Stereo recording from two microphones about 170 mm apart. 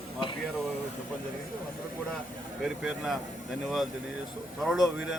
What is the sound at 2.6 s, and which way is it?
A man's voice, centre (ahead or behind).